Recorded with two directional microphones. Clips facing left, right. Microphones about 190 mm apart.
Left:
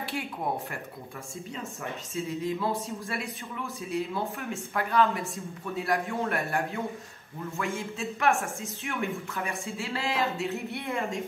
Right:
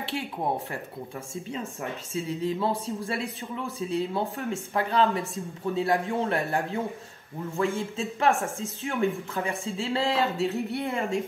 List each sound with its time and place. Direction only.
2.1 s a man's voice: 35° right (ahead or behind)